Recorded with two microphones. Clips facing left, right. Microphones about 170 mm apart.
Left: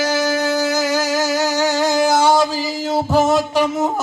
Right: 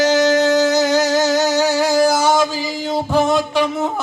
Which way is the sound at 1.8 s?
20° left (ahead or behind).